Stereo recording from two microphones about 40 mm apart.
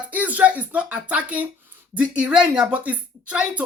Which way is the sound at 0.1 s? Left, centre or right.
Right.